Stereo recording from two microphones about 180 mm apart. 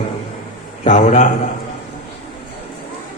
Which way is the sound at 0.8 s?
45° left (ahead or behind).